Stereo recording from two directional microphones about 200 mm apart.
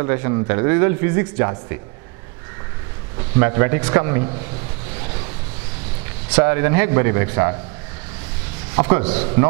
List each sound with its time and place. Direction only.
0.0 s speech: 20° right (ahead or behind)
3.3 s speech: 15° right (ahead or behind)
6.3 s speech: 15° right (ahead or behind)
8.7 s a man's voice: 15° right (ahead or behind)